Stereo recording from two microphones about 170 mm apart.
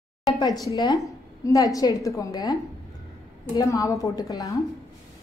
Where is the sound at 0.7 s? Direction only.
25° left (ahead or behind).